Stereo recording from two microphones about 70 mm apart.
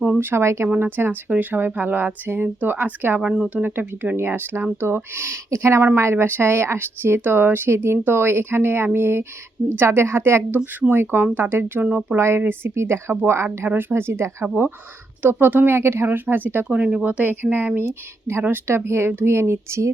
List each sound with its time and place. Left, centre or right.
0.0 s a woman's voice: right
3.2 s speech: centre
3.5 s a woman's voice: right
12.1 s a woman's voice: right
16.6 s speech: centre
18.7 s a woman's voice: right